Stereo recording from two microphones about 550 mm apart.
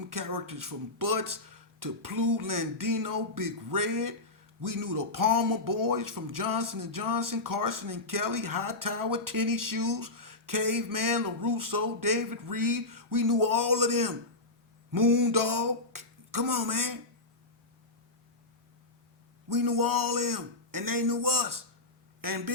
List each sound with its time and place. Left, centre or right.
0.0 s speech: right
19.5 s speech: right